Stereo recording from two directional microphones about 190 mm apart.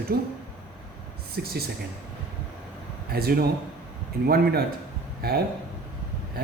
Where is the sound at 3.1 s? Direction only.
55° right (ahead or behind).